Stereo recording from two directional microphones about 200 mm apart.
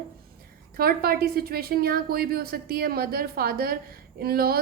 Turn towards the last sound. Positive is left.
turn(degrees=-50)  # may be behind; listen again after turning